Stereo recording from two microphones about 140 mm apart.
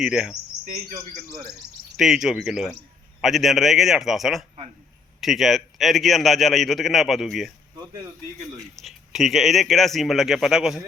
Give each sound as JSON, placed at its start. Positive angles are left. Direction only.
{"t": 0.0, "sound": "a man's voice", "side_deg": -5}
{"t": 0.7, "sound": "speech", "side_deg": -65}
{"t": 2.0, "sound": "a man's voice", "side_deg": -5}
{"t": 8.8, "sound": "a man's voice", "side_deg": 0}